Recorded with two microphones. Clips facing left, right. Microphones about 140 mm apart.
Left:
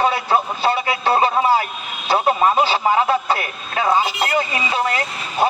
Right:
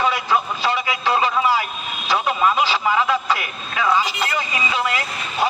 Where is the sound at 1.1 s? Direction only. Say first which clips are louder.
Left 3 dB; 35° left (ahead or behind).